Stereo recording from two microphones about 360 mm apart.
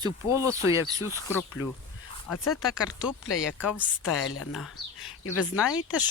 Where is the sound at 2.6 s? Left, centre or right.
Centre.